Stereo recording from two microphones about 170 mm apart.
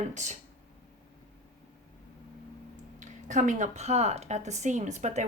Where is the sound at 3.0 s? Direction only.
45° right (ahead or behind).